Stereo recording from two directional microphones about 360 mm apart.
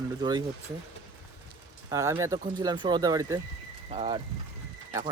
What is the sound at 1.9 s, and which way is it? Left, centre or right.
Speech, centre.